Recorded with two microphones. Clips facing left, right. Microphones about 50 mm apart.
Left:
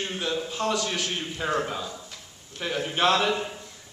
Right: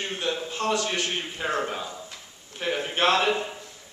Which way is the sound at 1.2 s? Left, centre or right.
Centre.